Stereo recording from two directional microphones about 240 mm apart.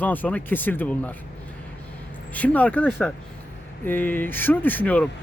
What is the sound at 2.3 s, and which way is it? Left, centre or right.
A man's voice, centre.